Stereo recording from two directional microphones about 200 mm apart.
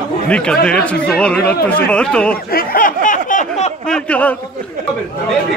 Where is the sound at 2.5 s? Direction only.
45° left (ahead or behind).